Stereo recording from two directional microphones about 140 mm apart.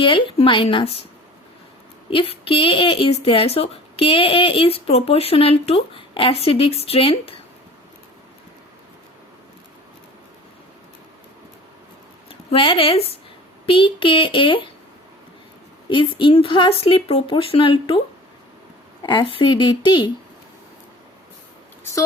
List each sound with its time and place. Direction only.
0.0 s speech: 35° left (ahead or behind)
2.0 s a woman's voice: 40° left (ahead or behind)
12.3 s speech: 40° left (ahead or behind)
15.9 s speech: 35° left (ahead or behind)
19.0 s speech: 35° left (ahead or behind)